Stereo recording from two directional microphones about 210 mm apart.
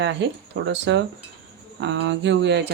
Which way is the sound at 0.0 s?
55° right (ahead or behind).